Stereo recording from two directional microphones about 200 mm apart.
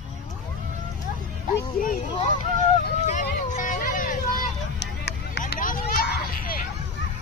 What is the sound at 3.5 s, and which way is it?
Hubbub, 40° left (ahead or behind).